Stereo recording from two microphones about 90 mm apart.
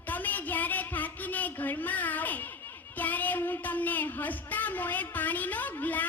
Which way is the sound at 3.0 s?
20° left (ahead or behind).